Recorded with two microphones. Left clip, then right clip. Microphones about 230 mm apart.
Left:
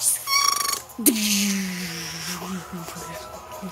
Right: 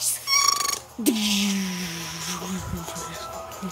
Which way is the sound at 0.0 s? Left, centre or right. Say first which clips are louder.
Even; centre.